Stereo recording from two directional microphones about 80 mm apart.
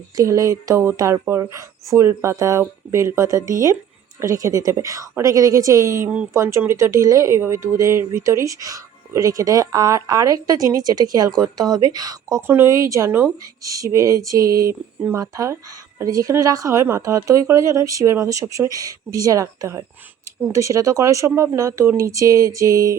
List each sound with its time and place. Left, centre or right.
0.2 s speech: right
12.5 s speech: right
12.7 s speech: right
13.1 s speech: right
13.7 s speech: right
14.7 s speech: right
15.2 s speech: right
16.8 s speech: right